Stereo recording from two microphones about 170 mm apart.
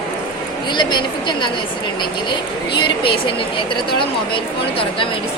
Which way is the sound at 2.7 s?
30° left (ahead or behind).